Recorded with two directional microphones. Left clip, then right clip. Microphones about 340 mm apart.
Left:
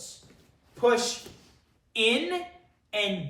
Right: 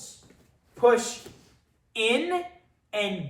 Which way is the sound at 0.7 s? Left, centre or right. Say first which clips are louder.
Right 3 dB; centre.